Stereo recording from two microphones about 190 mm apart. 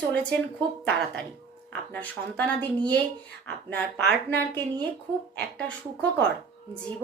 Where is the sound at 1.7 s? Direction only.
5° left (ahead or behind).